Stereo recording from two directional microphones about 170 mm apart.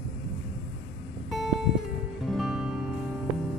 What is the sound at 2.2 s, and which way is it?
Music, centre (ahead or behind).